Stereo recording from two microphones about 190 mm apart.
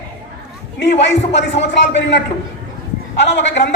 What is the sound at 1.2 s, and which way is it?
Music, 35° left (ahead or behind).